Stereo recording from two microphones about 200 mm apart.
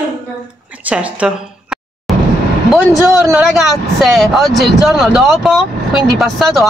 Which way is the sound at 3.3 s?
5° right (ahead or behind).